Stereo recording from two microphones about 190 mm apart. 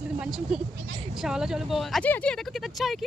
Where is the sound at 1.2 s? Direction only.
5° right (ahead or behind).